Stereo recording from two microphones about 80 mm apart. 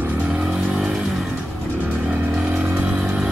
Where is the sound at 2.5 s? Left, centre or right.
Right.